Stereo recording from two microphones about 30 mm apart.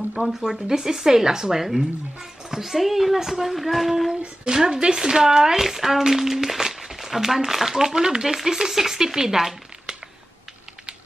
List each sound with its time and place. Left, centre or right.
0.1 s speech: centre
4.5 s speech: right
7.7 s speech: centre